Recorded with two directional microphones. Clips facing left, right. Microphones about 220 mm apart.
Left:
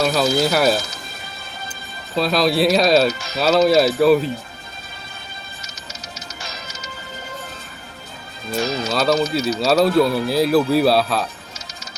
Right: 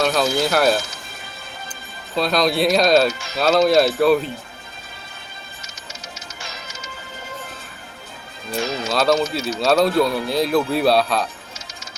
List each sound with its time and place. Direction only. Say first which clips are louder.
0.0 s speech: left 1 dB; 5° left (ahead or behind)
2.1 s speech: left 1 dB; centre (ahead or behind)
3.1 s speech: left 3 dB; 40° left (ahead or behind)
3.3 s speech: even; centre (ahead or behind)
5.6 s music: right 1 dB; 40° left (ahead or behind)
8.6 s speech: left 3 dB; 40° left (ahead or behind)
8.9 s speech: right 1 dB; 5° left (ahead or behind)